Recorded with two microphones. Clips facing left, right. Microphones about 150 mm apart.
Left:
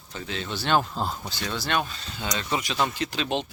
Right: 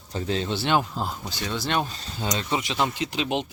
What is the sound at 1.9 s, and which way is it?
Speech, 35° right (ahead or behind).